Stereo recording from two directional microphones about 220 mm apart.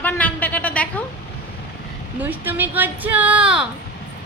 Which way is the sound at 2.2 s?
10° right (ahead or behind).